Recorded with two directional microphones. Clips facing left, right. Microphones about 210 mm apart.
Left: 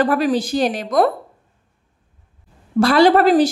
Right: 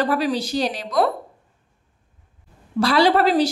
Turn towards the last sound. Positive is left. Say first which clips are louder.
# left 4 dB
turn(degrees=50)  # may be behind; listen again after turning